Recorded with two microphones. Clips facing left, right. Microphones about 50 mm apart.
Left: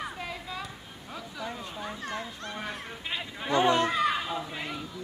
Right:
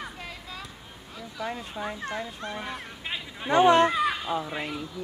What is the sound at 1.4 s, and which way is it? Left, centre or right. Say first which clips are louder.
Speech: right 5 dB; centre.